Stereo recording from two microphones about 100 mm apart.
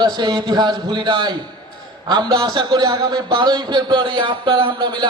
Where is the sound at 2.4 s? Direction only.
50° right (ahead or behind).